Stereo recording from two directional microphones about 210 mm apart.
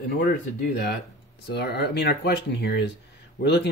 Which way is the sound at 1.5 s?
50° left (ahead or behind).